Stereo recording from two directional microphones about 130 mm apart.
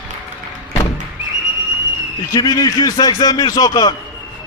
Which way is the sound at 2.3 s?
30° left (ahead or behind).